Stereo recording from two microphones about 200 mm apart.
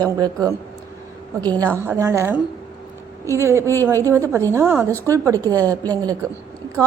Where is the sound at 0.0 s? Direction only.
20° right (ahead or behind).